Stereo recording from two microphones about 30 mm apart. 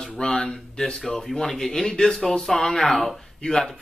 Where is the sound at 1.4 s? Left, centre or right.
Centre.